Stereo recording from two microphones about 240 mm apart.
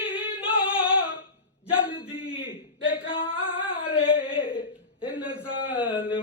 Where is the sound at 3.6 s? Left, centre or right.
Left.